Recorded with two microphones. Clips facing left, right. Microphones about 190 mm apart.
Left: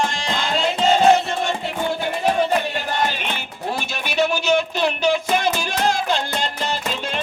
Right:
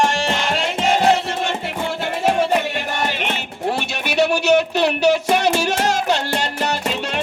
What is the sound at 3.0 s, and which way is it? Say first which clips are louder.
Music: right 2 dB; 75° right (ahead or behind).